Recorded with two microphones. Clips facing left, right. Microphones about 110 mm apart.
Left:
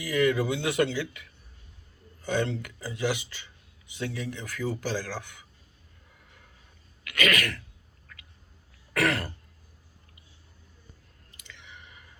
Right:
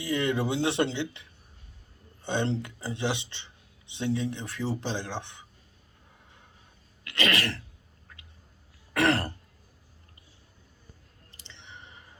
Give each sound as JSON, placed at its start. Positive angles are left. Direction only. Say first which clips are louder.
{"t": 0.0, "sound": "speech", "louder": "left 3 dB", "side_deg": -25}
{"t": 7.0, "sound": "throat clearing", "louder": "left 1 dB", "side_deg": -30}
{"t": 8.1, "sound": "a sound", "louder": "left 1 dB", "side_deg": -25}
{"t": 8.9, "sound": "throat clearing", "louder": "right 2 dB", "side_deg": -25}
{"t": 11.3, "sound": "clicking", "louder": "right 1 dB", "side_deg": -30}